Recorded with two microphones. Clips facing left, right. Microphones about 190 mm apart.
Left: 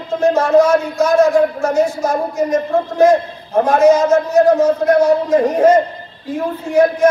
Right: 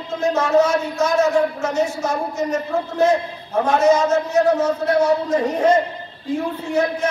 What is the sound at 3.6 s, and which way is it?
A man's voice, 10° left (ahead or behind).